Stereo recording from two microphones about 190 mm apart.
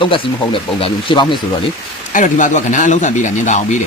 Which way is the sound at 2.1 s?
40° left (ahead or behind).